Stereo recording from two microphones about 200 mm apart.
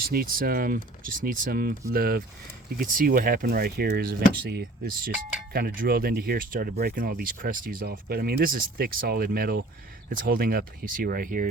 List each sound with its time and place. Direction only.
0.0 s speech: 50° right (ahead or behind)